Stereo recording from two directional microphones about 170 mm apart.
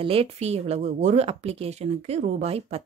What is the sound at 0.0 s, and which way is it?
A woman's voice, 35° right (ahead or behind).